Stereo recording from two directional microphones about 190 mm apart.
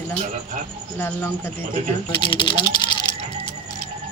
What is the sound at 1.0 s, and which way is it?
Speech, 10° left (ahead or behind).